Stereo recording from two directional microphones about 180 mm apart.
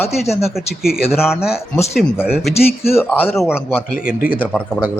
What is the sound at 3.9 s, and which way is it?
Speech, 50° left (ahead or behind).